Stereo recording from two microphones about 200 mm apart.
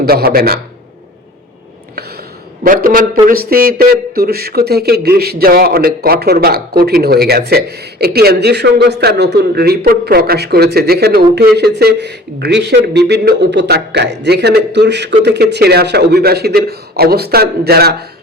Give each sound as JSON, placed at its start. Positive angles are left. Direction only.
{"t": 0.0, "sound": "a man's voice", "side_deg": -50}
{"t": 2.6, "sound": "a man's voice", "side_deg": -45}